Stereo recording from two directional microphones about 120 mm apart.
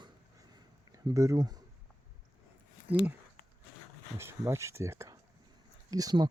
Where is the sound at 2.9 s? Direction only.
15° right (ahead or behind).